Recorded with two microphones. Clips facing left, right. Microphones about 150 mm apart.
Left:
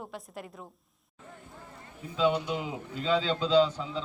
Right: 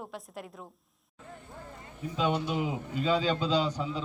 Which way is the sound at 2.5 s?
20° right (ahead or behind).